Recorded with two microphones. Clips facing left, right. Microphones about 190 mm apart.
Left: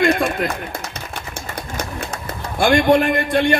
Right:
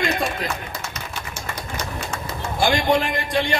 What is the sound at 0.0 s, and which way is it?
Speech, 55° left (ahead or behind).